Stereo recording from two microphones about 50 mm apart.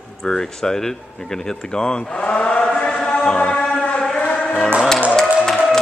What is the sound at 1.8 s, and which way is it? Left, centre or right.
Speech, centre.